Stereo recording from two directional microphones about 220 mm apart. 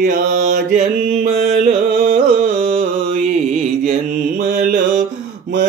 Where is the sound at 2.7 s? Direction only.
40° right (ahead or behind).